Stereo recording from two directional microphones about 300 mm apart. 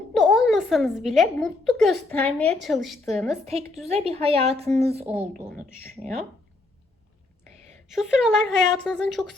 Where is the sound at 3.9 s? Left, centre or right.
Centre.